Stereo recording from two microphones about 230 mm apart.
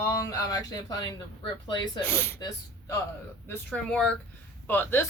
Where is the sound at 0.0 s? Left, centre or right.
Centre.